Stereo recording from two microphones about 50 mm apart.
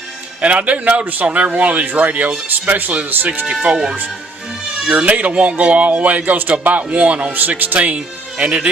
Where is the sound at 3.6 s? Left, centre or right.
Centre; by 7.9 s right.